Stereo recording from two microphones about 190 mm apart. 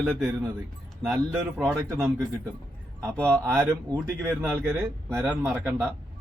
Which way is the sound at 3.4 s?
10° right (ahead or behind).